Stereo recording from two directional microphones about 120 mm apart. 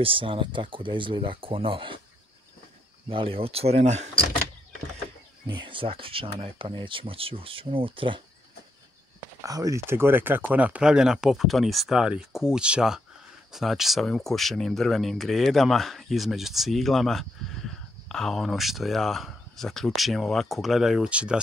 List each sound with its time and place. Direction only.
0.0 s speech: 45° right (ahead or behind)
3.1 s speech: 50° right (ahead or behind); by 4.1 s 70° right (ahead or behind)
5.5 s speech: 40° right (ahead or behind)
9.4 s speech: 30° right (ahead or behind); by 21.4 s 10° right (ahead or behind)